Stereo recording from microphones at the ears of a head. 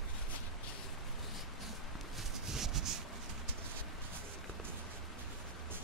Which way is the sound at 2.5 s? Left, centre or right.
Right.